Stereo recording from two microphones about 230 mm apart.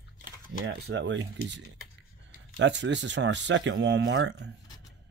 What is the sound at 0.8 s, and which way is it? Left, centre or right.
Speech, right.